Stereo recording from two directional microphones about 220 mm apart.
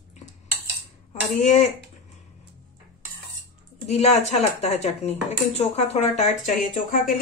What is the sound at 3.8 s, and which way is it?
A woman's voice, 30° left (ahead or behind).